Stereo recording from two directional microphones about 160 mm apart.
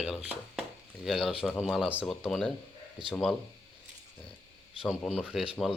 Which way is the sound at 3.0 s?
30° right (ahead or behind).